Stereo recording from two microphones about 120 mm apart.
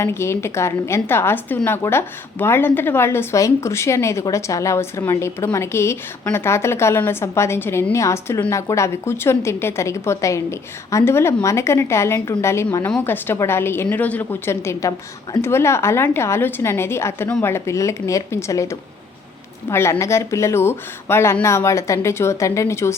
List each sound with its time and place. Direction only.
0.0 s a woman's voice: 20° left (ahead or behind)